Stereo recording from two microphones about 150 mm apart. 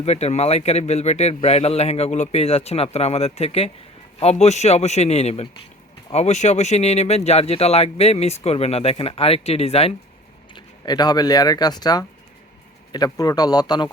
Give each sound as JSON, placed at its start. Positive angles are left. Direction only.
{"t": 0.0, "sound": "speech", "side_deg": 45}
{"t": 10.5, "sound": "a man's voice", "side_deg": 30}